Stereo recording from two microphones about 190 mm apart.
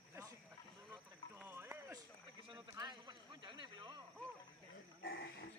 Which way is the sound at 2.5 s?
25° right (ahead or behind).